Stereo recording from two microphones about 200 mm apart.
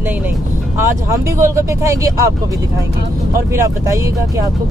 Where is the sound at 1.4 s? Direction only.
15° right (ahead or behind).